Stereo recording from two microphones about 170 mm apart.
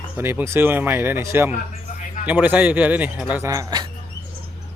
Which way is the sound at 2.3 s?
10° right (ahead or behind).